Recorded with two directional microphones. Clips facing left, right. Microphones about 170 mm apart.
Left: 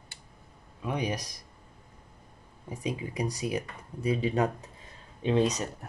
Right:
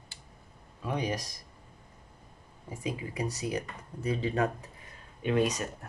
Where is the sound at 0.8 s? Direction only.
15° left (ahead or behind).